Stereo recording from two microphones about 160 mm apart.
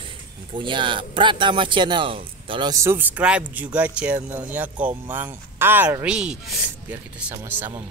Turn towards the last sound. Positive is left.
turn(degrees=-15)  # may be behind; listen again after turning